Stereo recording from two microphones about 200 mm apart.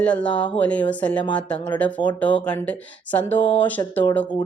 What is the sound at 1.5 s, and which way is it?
Speech, 20° left (ahead or behind).